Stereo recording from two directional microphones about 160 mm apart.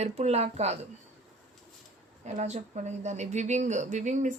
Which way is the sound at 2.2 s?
45° right (ahead or behind).